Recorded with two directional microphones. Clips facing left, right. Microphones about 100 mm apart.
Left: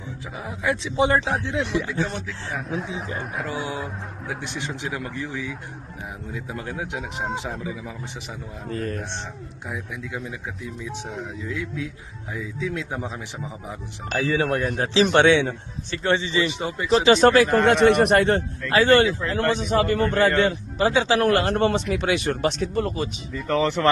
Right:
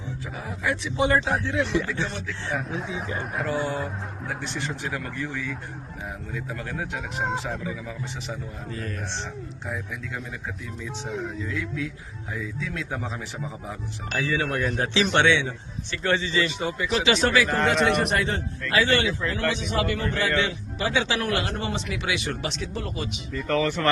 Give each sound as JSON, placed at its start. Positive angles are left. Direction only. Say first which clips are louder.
{"t": 0.3, "sound": "a man's voice", "louder": "left 3 dB", "side_deg": 20}
{"t": 1.6, "sound": "speech", "louder": "even", "side_deg": 0}
{"t": 2.0, "sound": "a man's voice", "louder": "left 3 dB", "side_deg": 45}
{"t": 2.5, "sound": "speech", "louder": "left 1 dB", "side_deg": 0}
{"t": 4.4, "sound": "a man's voice", "louder": "even", "side_deg": 15}
{"t": 8.7, "sound": "speech", "louder": "left 7 dB", "side_deg": 40}
{"t": 9.6, "sound": "speech", "louder": "left 2 dB", "side_deg": 10}
{"t": 11.4, "sound": "a man's voice", "louder": "left 1 dB", "side_deg": 20}
{"t": 14.2, "sound": "a man's voice", "louder": "left 4 dB", "side_deg": 30}
{"t": 15.1, "sound": "speech", "louder": "left 4 dB", "side_deg": 40}
{"t": 16.0, "sound": "speech", "louder": "left 2 dB", "side_deg": 25}
{"t": 17.8, "sound": "speech", "louder": "left 7 dB", "side_deg": 60}
{"t": 18.7, "sound": "a man's voice", "louder": "left 6 dB", "side_deg": 45}
{"t": 23.6, "sound": "a man's voice", "louder": "left 4 dB", "side_deg": 20}